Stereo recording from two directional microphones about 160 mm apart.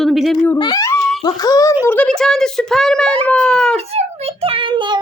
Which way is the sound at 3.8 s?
40° right (ahead or behind).